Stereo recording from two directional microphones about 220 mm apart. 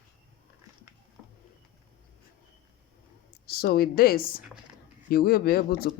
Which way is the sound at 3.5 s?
45° left (ahead or behind).